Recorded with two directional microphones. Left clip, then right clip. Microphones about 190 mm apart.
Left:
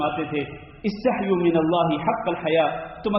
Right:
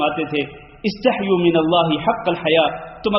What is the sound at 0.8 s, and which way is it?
A man's voice, 30° right (ahead or behind).